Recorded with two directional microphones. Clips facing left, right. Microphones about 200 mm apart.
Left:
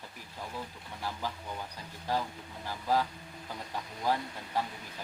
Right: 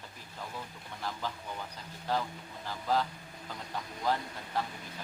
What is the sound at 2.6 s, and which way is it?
Speech, 10° left (ahead or behind).